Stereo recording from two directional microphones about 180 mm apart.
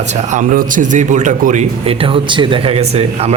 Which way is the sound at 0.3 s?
45° right (ahead or behind).